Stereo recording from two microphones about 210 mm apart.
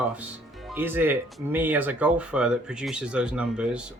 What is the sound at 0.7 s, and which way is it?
Speech, 10° right (ahead or behind).